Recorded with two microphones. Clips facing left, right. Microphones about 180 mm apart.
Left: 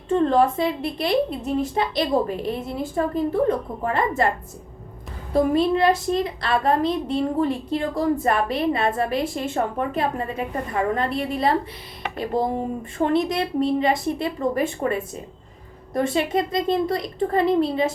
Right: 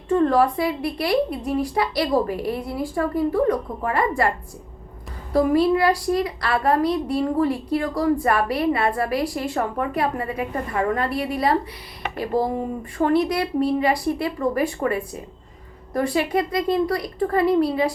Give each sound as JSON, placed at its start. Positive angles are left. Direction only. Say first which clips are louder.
{"t": 0.1, "sound": "a woman's voice", "louder": "even", "side_deg": 25}
{"t": 5.3, "sound": "a woman's voice", "louder": "right 1 dB", "side_deg": 20}